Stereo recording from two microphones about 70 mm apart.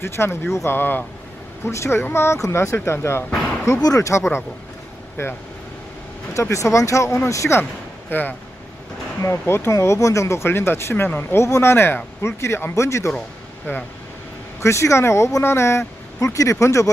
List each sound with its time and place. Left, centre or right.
0.0 s speech: left
1.7 s speech: left
3.8 s speech: left
5.2 s speech: left
6.5 s speech: left
8.1 s speech: left
9.2 s speech: left
11.4 s speech: left
13.7 s speech: left
14.6 s speech: left